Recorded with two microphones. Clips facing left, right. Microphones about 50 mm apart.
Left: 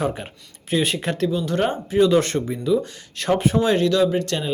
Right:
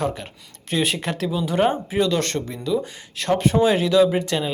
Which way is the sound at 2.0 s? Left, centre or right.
Centre.